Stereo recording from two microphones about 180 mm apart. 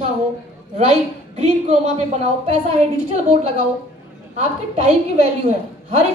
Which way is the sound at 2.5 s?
35° right (ahead or behind).